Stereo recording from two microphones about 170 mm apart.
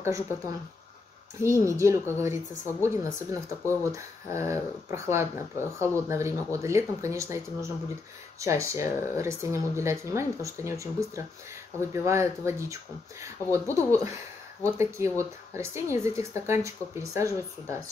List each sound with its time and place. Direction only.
1.4 s speech: 15° right (ahead or behind)